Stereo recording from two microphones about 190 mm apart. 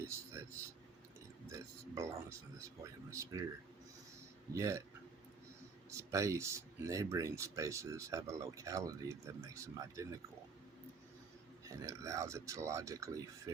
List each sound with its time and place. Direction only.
0.0 s a sound: 15° right (ahead or behind)
1.5 s speech: 15° right (ahead or behind)
4.5 s speech: 15° right (ahead or behind)
5.9 s speech: 15° right (ahead or behind)
11.7 s speech: 15° right (ahead or behind)